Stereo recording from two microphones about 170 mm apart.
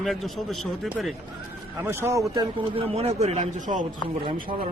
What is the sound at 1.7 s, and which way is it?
Speech, 15° right (ahead or behind).